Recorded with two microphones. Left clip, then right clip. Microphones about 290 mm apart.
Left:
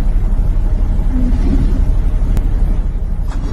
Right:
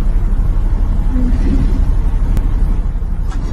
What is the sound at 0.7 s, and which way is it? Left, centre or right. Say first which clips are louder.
Vehicle: even; centre.